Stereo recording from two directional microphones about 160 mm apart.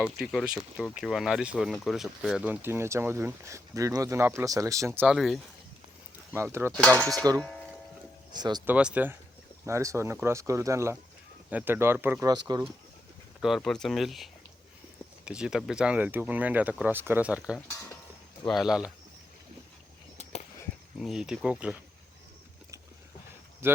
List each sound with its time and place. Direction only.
0.0 s speech: centre (ahead or behind); by 5.0 s 20° right (ahead or behind)
5.0 s speech: centre (ahead or behind)
6.3 s speech: 15° right (ahead or behind)
6.7 s a sound: 5° left (ahead or behind)
8.3 s speech: 25° right (ahead or behind)
8.6 s speech: 10° right (ahead or behind)
12.3 s speech: 25° right (ahead or behind)
13.4 s speech: centre (ahead or behind)
21.0 s speech: 5° right (ahead or behind)
23.6 s speech: 15° right (ahead or behind)